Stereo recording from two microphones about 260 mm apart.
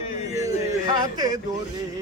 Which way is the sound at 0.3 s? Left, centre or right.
Centre.